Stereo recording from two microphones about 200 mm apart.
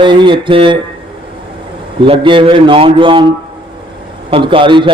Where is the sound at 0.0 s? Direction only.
25° right (ahead or behind).